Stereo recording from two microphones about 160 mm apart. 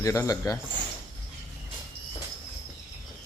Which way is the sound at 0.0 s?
20° left (ahead or behind).